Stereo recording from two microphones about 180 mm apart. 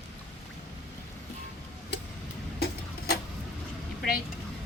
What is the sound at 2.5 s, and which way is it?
Tick-tock, 60° left (ahead or behind).